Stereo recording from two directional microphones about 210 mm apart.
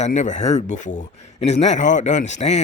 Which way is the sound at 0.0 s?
35° left (ahead or behind).